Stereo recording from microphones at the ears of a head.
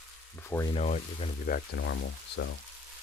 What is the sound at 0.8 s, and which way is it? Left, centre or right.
Speech, left.